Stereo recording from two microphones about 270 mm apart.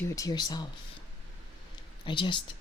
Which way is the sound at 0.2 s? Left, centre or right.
Centre.